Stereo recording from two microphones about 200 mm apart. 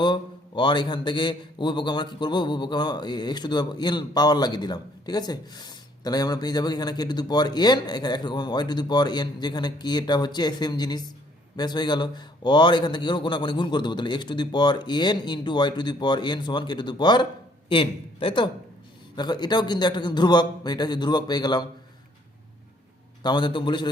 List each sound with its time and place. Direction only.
0.0 s a man's voice: 25° left (ahead or behind)
23.2 s a man's voice: 20° left (ahead or behind)